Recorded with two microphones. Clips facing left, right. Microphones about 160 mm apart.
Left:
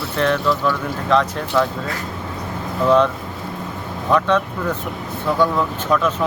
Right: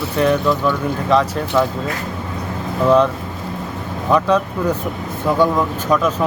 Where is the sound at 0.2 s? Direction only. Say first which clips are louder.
Right 3 dB; 10° right (ahead or behind).